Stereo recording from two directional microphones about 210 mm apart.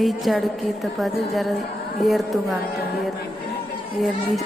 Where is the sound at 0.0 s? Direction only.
Centre (ahead or behind).